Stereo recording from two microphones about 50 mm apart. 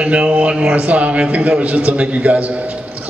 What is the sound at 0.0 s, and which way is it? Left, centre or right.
A man's voice, right.